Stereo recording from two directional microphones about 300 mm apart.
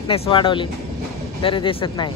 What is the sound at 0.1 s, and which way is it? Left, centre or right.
Speech, centre.